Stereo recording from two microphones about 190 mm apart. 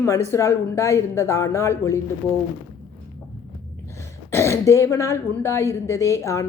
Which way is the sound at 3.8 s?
15° left (ahead or behind).